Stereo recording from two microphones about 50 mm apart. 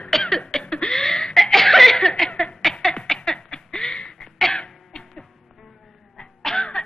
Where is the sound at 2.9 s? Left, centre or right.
Centre.